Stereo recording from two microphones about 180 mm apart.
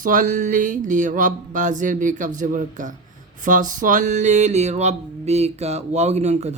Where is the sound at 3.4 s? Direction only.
45° right (ahead or behind).